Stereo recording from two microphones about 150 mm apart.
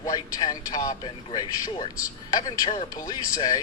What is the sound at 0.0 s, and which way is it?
A man's voice, 25° left (ahead or behind).